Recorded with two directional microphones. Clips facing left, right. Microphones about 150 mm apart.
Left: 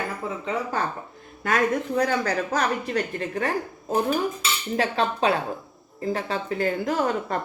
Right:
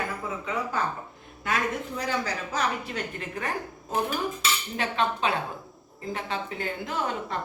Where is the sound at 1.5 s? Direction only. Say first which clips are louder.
Left 6 dB; 50° left (ahead or behind).